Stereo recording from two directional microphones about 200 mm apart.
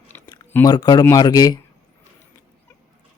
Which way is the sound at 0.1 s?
10° left (ahead or behind).